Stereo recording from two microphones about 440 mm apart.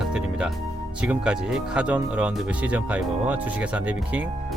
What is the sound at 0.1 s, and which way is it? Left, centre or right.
Music, centre.